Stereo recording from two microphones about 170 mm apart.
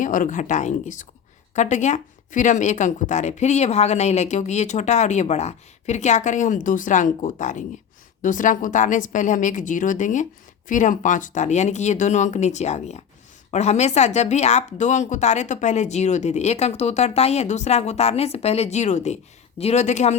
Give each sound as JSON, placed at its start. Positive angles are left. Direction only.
{"t": 0.0, "sound": "a woman's voice", "side_deg": 50}